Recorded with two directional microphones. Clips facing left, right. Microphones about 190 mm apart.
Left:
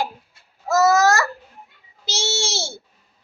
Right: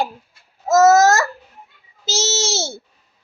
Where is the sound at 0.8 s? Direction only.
40° right (ahead or behind).